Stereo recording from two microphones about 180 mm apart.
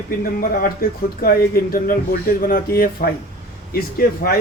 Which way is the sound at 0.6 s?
55° left (ahead or behind).